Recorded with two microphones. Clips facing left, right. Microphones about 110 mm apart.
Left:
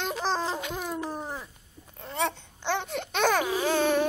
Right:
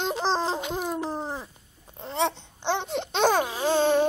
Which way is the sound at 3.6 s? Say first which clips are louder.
Right 5 dB; 25° right (ahead or behind).